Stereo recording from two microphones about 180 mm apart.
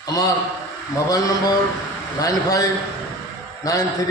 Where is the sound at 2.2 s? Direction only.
20° left (ahead or behind).